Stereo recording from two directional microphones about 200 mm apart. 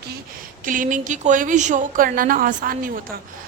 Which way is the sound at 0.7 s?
40° right (ahead or behind).